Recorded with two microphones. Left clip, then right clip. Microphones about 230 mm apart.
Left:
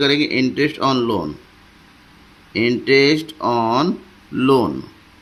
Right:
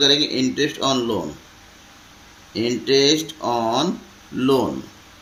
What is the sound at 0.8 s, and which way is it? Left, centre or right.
Speech, left.